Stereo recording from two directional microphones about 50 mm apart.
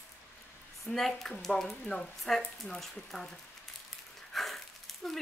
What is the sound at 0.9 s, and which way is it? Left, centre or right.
Speech, centre.